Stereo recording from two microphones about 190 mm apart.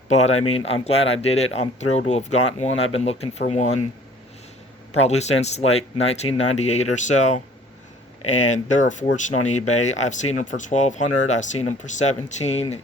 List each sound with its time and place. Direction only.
0.1 s speech: 35° left (ahead or behind)
4.9 s speech: 35° left (ahead or behind)